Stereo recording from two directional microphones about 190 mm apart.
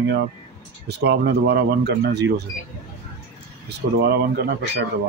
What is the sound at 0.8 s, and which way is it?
Speech, 60° right (ahead or behind).